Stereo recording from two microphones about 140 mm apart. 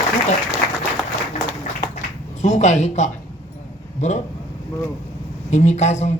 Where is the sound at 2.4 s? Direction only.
55° left (ahead or behind).